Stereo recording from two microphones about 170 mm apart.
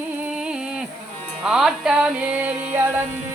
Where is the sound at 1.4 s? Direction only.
5° right (ahead or behind).